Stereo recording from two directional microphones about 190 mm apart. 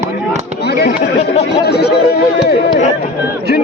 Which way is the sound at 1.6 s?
60° left (ahead or behind).